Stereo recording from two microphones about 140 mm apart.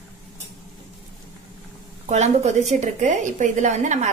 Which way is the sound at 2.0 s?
55° right (ahead or behind).